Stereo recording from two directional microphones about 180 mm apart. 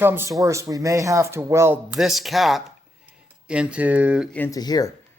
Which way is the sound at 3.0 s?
5° right (ahead or behind).